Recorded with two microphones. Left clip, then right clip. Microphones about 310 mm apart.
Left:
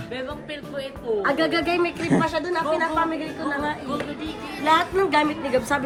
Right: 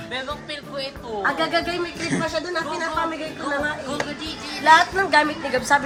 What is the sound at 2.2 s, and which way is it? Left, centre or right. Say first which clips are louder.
Speech: left 1 dB; left.